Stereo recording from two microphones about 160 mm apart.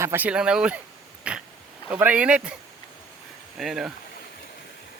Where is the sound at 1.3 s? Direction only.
5° right (ahead or behind).